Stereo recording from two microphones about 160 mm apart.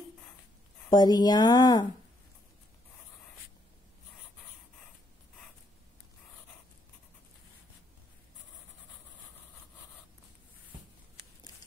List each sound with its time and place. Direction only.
0.8 s speech: 25° left (ahead or behind)